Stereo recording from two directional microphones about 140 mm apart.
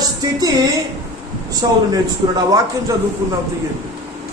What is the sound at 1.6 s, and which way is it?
Speech, 30° right (ahead or behind).